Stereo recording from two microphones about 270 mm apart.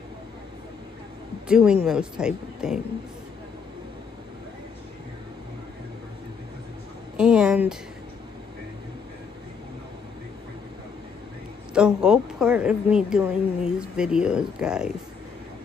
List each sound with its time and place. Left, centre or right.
1.5 s a woman's voice: centre
7.2 s a sound: centre
11.7 s a woman's voice: centre